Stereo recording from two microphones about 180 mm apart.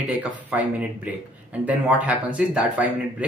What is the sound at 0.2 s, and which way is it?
Speech, 5° right (ahead or behind).